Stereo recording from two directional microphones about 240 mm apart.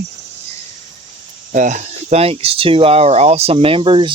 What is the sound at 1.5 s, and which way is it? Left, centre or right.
Speech, right.